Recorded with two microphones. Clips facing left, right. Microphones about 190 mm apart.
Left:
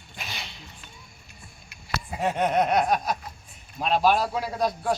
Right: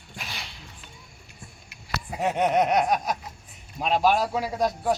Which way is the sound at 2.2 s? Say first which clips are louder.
Right 1 dB; 20° right (ahead or behind).